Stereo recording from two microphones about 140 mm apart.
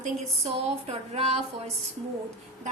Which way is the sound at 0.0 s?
50° right (ahead or behind).